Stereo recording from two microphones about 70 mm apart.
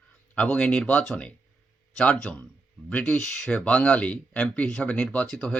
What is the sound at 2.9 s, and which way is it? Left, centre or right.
Speech, left.